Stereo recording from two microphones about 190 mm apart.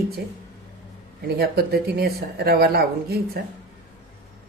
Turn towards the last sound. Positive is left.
turn(degrees=-55)  # may be behind; listen again after turning